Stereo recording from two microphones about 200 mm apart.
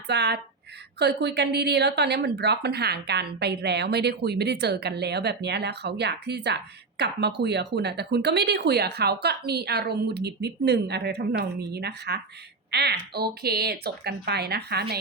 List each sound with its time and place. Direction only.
0.1 s speech: 60° right (ahead or behind)